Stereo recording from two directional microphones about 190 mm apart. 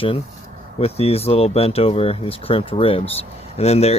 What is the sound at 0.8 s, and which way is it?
Speech, 30° left (ahead or behind).